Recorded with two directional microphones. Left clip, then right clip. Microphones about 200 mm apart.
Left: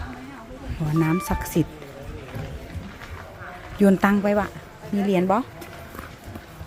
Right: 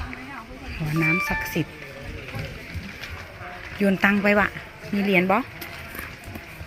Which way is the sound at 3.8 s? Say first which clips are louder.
Left 1 dB; 25° left (ahead or behind).